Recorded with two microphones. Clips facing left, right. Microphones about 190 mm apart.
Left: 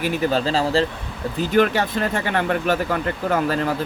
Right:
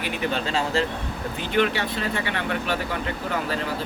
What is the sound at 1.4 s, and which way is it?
Speech, 45° left (ahead or behind).